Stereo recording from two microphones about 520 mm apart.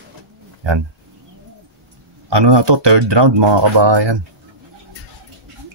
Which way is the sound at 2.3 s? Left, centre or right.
Right.